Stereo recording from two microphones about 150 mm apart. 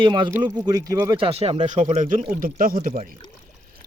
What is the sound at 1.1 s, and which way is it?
Speech, 40° right (ahead or behind).